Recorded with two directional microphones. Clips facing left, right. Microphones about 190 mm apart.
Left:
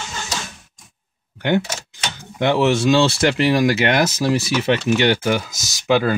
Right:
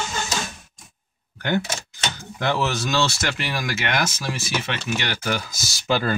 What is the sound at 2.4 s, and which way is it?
Speech, 25° left (ahead or behind).